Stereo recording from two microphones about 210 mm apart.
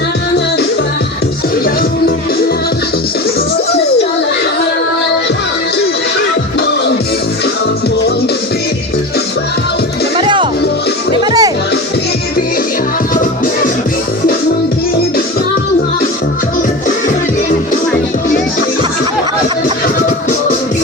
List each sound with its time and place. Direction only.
10.2 s music: 25° right (ahead or behind)